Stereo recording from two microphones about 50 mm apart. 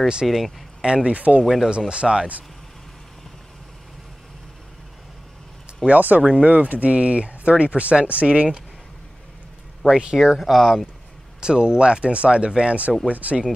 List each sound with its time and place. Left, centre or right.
0.2 s speech: centre
0.8 s speech: centre
5.9 s speech: right
9.8 s speech: centre
10.4 s speech: centre
11.4 s speech: centre